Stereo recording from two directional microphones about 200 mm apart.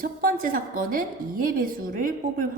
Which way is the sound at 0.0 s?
45° right (ahead or behind).